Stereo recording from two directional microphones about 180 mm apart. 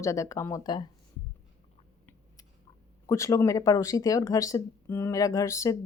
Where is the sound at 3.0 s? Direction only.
15° left (ahead or behind).